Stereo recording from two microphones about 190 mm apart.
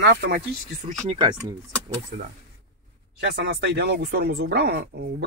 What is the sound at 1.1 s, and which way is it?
Speech, 20° right (ahead or behind).